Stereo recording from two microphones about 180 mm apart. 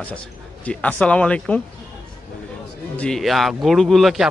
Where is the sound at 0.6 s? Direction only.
10° left (ahead or behind).